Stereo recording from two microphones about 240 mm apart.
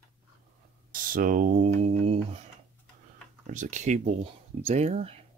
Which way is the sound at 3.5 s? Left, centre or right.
Right.